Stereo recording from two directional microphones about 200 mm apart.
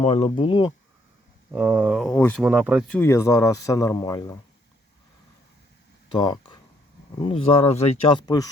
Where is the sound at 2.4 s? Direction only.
5° right (ahead or behind); by 4.4 s 15° left (ahead or behind).